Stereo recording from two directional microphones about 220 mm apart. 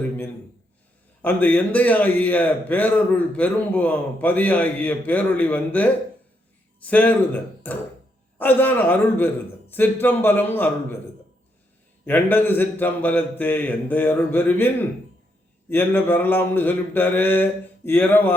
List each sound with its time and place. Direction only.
1.2 s a man's voice: 10° left (ahead or behind)
12.0 s a man's voice: 10° left (ahead or behind)